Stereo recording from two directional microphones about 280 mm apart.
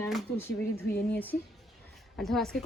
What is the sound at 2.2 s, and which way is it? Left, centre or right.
Speech, centre.